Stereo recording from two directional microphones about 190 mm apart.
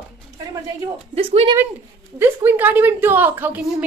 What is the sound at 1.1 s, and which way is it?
Speech, 30° right (ahead or behind).